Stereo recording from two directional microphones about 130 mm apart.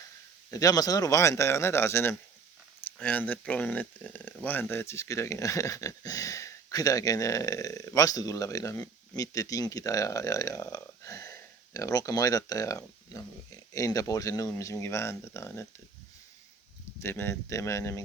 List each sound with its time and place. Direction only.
0.5 s speech: 30° left (ahead or behind)
17.0 s speech: 20° left (ahead or behind)